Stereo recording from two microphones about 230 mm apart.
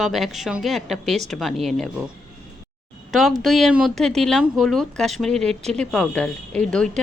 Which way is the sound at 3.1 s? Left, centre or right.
Centre.